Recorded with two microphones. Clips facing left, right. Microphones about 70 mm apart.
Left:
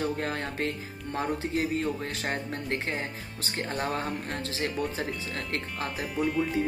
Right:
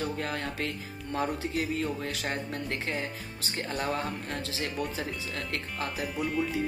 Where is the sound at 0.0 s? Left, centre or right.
Left.